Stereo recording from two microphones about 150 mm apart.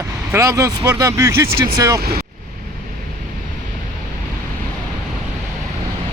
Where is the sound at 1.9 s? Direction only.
90° right.